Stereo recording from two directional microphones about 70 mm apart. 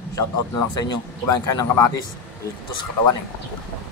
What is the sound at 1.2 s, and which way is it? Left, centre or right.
Speech, left.